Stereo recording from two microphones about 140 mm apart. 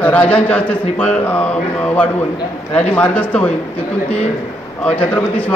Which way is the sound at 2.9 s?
10° left (ahead or behind).